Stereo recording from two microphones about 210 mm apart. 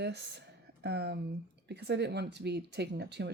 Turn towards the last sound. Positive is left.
turn(degrees=-55)  # may be behind; listen again after turning